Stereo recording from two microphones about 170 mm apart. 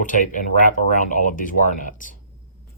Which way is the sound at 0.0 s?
50° left (ahead or behind).